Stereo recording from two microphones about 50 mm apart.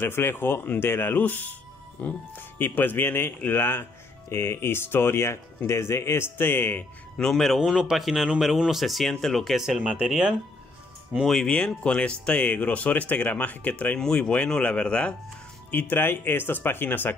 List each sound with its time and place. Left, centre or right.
0.0 s speech: left
2.3 s speech: left
4.3 s speech: left
7.2 s speech: centre
7.7 s speech: centre
9.6 s speech: centre
11.4 s speech: centre
13.9 s speech: centre
14.3 s speech: left
15.7 s speech: left